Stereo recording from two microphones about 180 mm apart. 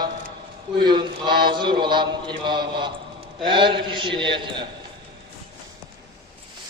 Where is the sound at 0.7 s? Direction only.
25° right (ahead or behind).